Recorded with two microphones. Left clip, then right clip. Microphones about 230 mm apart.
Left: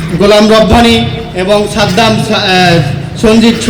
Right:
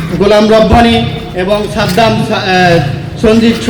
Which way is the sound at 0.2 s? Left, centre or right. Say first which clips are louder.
Left 1 dB; left.